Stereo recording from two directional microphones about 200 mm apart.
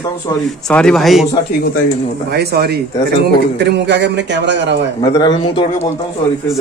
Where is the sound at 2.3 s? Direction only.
55° right (ahead or behind).